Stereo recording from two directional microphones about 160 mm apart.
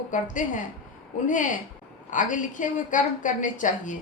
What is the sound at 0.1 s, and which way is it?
A woman's voice, 55° left (ahead or behind).